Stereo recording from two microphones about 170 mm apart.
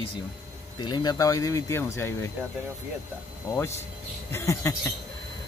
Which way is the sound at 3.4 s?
15° left (ahead or behind).